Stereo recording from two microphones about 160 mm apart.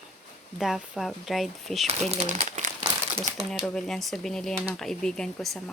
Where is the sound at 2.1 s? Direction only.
45° right (ahead or behind).